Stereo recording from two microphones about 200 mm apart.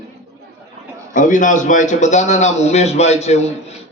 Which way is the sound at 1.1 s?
40° left (ahead or behind).